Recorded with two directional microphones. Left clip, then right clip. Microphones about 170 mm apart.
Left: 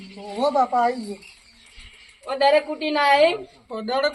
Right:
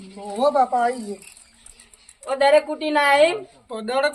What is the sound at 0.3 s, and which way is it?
Speech, 15° right (ahead or behind).